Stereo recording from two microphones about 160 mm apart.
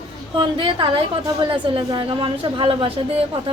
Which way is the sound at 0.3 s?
30° right (ahead or behind).